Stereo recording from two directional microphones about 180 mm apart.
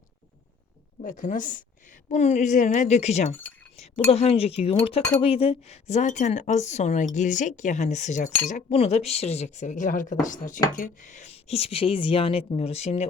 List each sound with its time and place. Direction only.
1.0 s a woman's voice: 45° left (ahead or behind)